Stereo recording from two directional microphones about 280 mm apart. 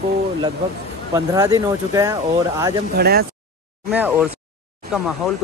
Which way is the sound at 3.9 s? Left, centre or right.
Centre.